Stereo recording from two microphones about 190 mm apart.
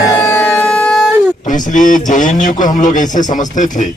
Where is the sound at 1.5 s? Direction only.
40° left (ahead or behind).